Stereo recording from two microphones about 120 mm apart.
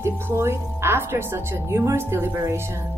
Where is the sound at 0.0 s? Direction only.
20° right (ahead or behind).